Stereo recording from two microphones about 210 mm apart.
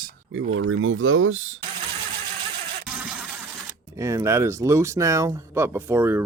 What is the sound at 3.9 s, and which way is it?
Speech, 15° right (ahead or behind).